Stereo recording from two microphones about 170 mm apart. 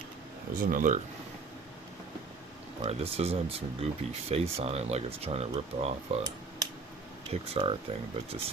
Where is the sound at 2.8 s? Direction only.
35° right (ahead or behind).